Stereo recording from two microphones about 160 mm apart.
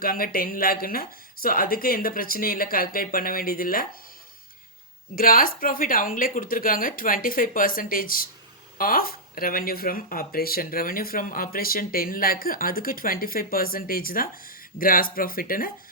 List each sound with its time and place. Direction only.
0.0 s speech: 65° left (ahead or behind)
5.1 s speech: 65° left (ahead or behind)